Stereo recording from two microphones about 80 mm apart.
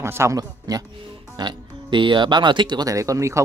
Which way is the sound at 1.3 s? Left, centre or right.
Right.